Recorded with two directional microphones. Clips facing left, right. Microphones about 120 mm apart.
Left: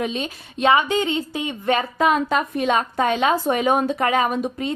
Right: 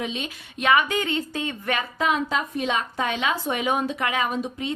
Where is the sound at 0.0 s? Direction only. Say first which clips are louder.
Left 5 dB; 40° left (ahead or behind); by 1.5 s 15° left (ahead or behind).